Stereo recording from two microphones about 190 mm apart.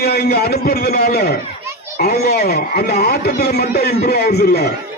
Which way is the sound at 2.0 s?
55° left (ahead or behind).